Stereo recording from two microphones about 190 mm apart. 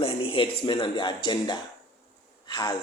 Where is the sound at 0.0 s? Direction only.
30° left (ahead or behind).